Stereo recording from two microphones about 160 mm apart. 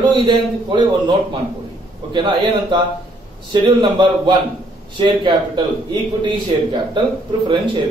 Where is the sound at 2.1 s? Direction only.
30° right (ahead or behind).